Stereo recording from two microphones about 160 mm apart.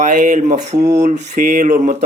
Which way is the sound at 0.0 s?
55° right (ahead or behind).